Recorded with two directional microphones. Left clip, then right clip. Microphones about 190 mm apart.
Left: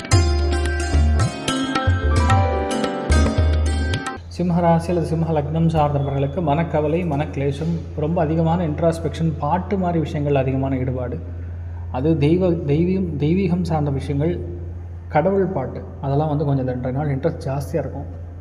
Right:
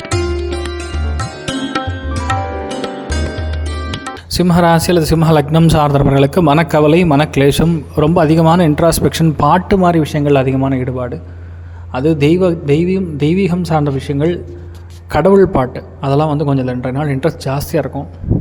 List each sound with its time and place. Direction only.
0.3 s music: centre (ahead or behind)
4.4 s a man's voice: 40° right (ahead or behind)
15.1 s a man's voice: 40° right (ahead or behind)